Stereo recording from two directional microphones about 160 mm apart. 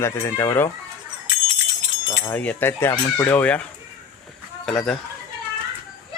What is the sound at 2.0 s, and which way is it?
Speech, 15° left (ahead or behind).